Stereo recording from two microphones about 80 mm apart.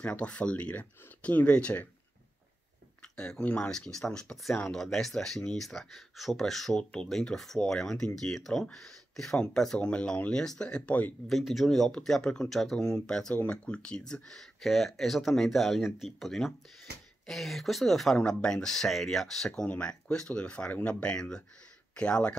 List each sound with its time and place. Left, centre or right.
0.0 s speech: centre
3.0 s speech: centre
11.2 s speech: centre